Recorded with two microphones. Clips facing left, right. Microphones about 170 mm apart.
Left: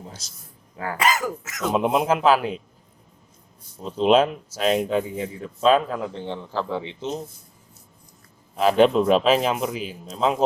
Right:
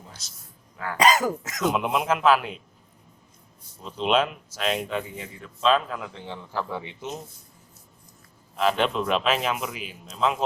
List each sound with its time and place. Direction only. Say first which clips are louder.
0.0 s a sound: left 6 dB; 30° left (ahead or behind)
0.9 s speech: right 3 dB; 20° right (ahead or behind)
1.7 s speech: left 8 dB; 35° left (ahead or behind)
3.8 s speech: left 6 dB; 35° left (ahead or behind)
6.6 s a man's voice: left 3 dB; 20° left (ahead or behind)
8.5 s speech: left 7 dB; 40° left (ahead or behind)